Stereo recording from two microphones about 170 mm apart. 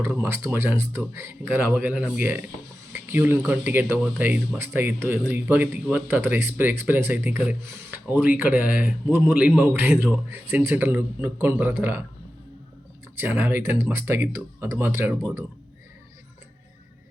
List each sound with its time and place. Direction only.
0.0 s speech: 15° right (ahead or behind)
9.5 s a man's voice: centre (ahead or behind)
10.0 s speech: 10° right (ahead or behind)
13.1 s speech: 10° right (ahead or behind)